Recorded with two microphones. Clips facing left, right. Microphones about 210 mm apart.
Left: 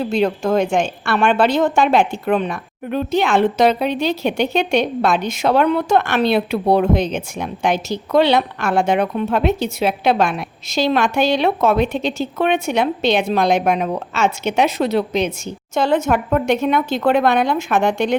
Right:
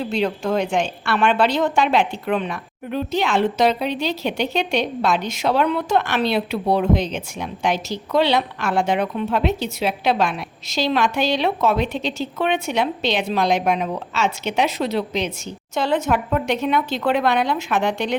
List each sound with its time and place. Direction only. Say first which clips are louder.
0.1 s a woman's voice: left 4 dB; 50° left (ahead or behind)